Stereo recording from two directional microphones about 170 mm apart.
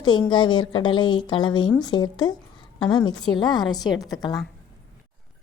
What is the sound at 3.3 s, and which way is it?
Speech, 25° left (ahead or behind).